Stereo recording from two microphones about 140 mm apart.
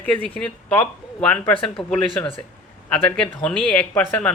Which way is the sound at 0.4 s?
10° left (ahead or behind).